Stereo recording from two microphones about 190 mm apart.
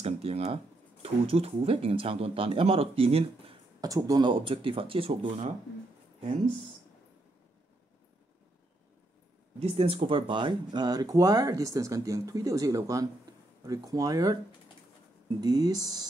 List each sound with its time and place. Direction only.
0.0 s speech: 35° right (ahead or behind)
3.8 s speech: 20° right (ahead or behind)
9.6 s speech: 30° right (ahead or behind)